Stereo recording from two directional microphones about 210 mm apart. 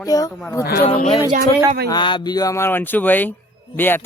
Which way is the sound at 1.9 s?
20° left (ahead or behind).